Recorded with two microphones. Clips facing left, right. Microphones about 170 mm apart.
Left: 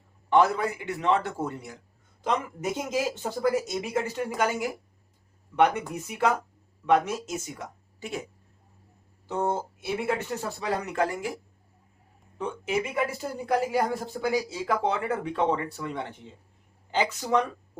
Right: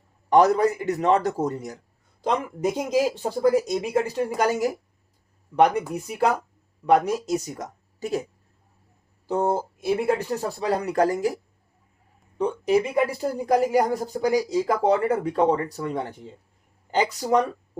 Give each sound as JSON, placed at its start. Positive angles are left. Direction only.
{"t": 0.3, "sound": "speech", "side_deg": -40}
{"t": 9.2, "sound": "speech", "side_deg": -35}
{"t": 12.4, "sound": "speech", "side_deg": -35}